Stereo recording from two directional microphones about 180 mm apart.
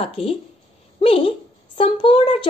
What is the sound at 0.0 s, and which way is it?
A woman's voice, 30° left (ahead or behind).